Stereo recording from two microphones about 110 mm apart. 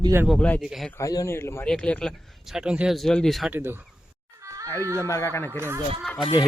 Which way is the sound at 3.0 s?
5° left (ahead or behind).